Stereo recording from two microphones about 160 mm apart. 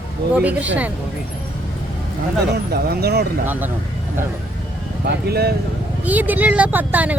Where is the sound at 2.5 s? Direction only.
80° right.